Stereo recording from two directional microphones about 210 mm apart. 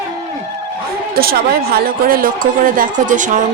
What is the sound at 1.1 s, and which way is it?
Speech, 45° right (ahead or behind).